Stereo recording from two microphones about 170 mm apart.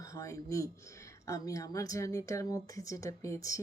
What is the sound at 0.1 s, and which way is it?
Speech, 20° left (ahead or behind).